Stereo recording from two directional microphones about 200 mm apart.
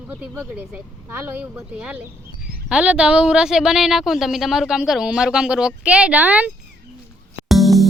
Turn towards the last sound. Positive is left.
turn(degrees=0)  # may be behind; listen again after turning